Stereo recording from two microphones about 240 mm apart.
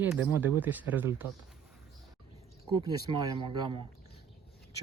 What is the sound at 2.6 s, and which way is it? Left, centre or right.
Speech, centre.